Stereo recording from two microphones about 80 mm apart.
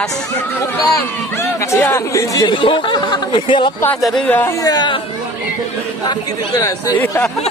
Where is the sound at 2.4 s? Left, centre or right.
Left.